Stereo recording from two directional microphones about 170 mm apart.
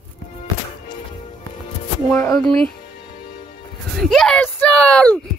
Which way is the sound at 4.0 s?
Centre (ahead or behind).